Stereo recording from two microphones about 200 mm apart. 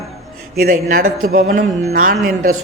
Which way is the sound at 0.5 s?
45° right (ahead or behind).